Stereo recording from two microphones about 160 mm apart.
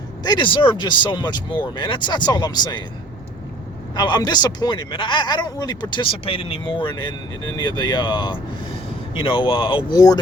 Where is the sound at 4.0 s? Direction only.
25° left (ahead or behind).